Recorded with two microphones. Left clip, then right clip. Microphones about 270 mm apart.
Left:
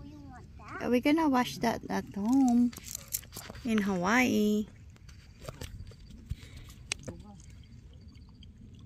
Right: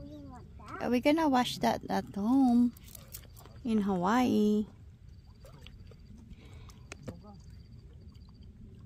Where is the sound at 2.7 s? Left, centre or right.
Left.